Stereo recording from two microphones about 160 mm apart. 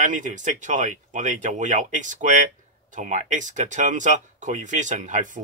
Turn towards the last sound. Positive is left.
turn(degrees=-50)  # may be behind; listen again after turning